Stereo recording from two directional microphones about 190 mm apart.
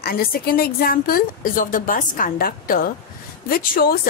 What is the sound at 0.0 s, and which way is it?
A woman's voice, 50° left (ahead or behind).